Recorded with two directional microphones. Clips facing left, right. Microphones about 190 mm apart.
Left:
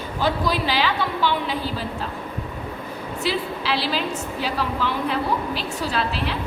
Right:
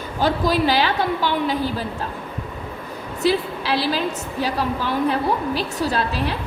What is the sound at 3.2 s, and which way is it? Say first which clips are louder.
A woman's voice: right 6 dB; 45° right (ahead or behind).